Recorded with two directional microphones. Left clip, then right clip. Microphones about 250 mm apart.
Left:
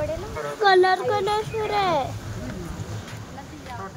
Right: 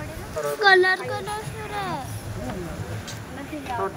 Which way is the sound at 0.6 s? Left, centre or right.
Left.